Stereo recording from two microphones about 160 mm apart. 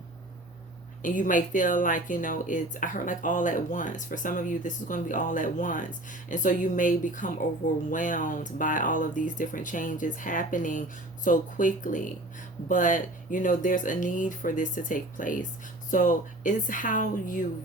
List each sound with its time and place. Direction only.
1.0 s speech: 55° left (ahead or behind)